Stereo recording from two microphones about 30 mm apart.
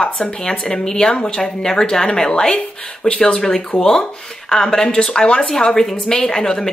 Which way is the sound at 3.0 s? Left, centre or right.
Left.